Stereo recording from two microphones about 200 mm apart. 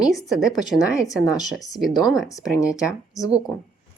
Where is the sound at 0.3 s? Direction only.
Centre (ahead or behind).